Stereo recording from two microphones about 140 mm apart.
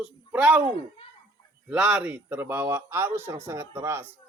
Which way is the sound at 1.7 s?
5° right (ahead or behind).